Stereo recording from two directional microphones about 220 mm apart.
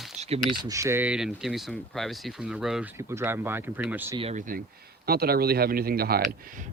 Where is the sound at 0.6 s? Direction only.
15° right (ahead or behind).